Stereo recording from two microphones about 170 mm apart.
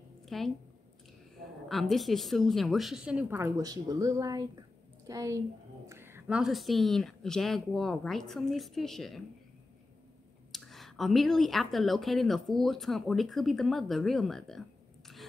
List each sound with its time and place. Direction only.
0.2 s a sound: centre (ahead or behind)
1.7 s a woman's voice: centre (ahead or behind)
10.5 s speech: centre (ahead or behind)